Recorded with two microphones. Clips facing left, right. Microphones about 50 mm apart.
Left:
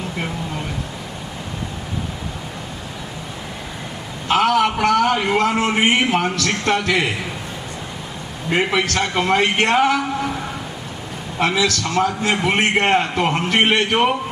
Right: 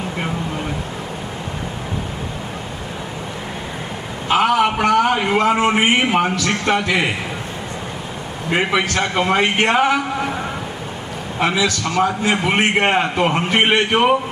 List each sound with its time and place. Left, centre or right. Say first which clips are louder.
4.3 s a man's voice: right 1 dB; centre
8.4 s a man's voice: right 1 dB; centre
11.3 s a man's voice: even; centre